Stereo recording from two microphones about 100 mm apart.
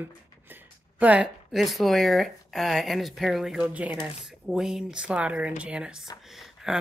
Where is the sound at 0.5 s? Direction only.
15° right (ahead or behind).